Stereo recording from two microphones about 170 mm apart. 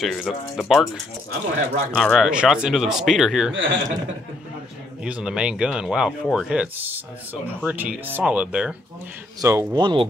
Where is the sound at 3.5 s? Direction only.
90° right.